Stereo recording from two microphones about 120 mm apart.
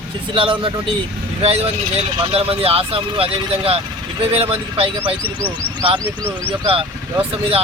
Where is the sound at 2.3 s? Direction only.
55° right (ahead or behind).